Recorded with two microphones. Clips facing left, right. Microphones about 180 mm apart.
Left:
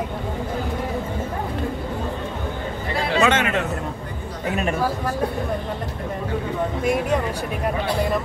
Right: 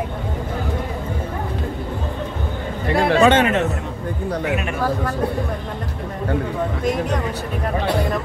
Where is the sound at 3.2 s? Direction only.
30° right (ahead or behind).